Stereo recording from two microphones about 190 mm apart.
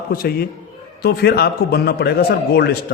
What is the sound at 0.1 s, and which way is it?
A man's voice, 55° left (ahead or behind).